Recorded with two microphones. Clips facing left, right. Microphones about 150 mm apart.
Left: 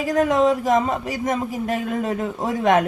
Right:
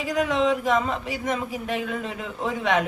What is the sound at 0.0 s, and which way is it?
Speech, 45° left (ahead or behind).